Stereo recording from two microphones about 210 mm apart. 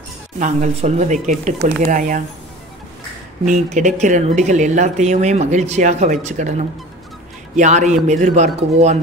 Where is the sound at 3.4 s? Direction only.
35° right (ahead or behind).